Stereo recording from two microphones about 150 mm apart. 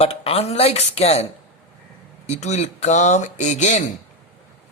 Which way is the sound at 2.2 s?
50° left (ahead or behind).